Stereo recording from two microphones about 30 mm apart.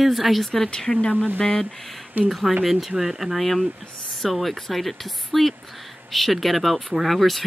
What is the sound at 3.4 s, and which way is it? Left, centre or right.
Speech, centre.